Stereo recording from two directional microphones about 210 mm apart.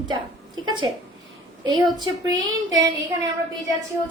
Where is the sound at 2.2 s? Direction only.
15° right (ahead or behind).